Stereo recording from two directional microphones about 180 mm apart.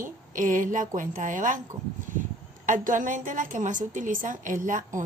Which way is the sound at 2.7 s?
45° right (ahead or behind).